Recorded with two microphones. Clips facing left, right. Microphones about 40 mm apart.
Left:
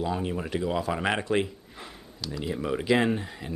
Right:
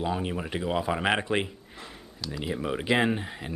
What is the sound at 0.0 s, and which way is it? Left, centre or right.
Speech, centre.